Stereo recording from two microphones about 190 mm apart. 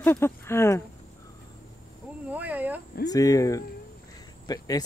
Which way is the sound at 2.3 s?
10° right (ahead or behind).